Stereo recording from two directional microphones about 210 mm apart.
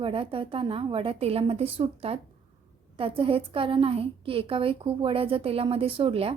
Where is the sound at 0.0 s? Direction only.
25° right (ahead or behind).